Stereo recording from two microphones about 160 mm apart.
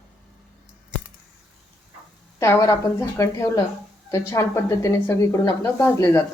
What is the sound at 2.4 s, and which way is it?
A woman's voice, 20° left (ahead or behind).